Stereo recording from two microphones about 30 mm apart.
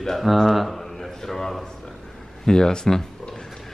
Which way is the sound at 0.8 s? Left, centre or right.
Centre.